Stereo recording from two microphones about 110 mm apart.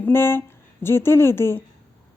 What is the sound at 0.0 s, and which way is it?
Speech, 20° left (ahead or behind).